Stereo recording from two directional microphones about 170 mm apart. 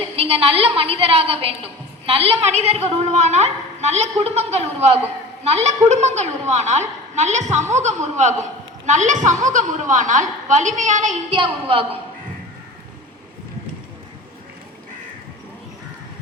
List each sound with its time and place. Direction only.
0.2 s a woman's voice: 35° right (ahead or behind)
11.3 s a woman's voice: 30° right (ahead or behind)